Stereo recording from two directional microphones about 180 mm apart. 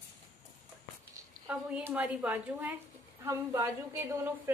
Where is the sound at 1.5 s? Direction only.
5° right (ahead or behind).